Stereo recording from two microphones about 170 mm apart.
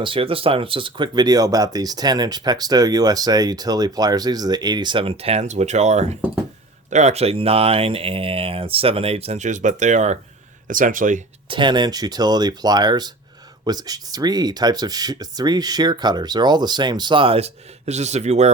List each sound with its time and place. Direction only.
0.0 s speech: 30° right (ahead or behind); by 11.2 s 50° right (ahead or behind)
11.4 s speech: 30° right (ahead or behind)